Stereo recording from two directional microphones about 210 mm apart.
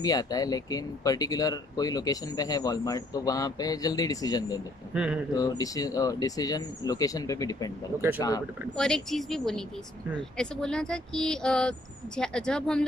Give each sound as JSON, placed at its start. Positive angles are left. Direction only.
{"t": 0.0, "sound": "speech", "side_deg": 15}
{"t": 4.9, "sound": "speech", "side_deg": -5}
{"t": 5.3, "sound": "speech", "side_deg": 15}
{"t": 8.7, "sound": "speech", "side_deg": 0}